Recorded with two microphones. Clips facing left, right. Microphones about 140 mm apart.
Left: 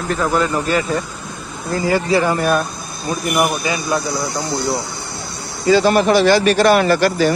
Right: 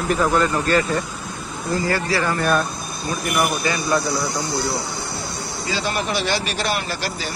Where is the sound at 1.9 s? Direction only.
15° left (ahead or behind).